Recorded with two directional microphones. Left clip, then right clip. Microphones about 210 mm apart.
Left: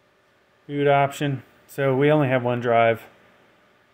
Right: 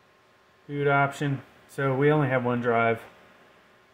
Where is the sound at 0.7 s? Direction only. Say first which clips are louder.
Left 4 dB; 55° left (ahead or behind).